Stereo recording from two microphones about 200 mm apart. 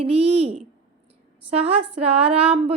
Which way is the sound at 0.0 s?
30° right (ahead or behind).